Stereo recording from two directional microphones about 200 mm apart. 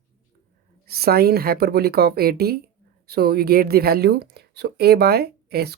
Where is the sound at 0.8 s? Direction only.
50° right (ahead or behind).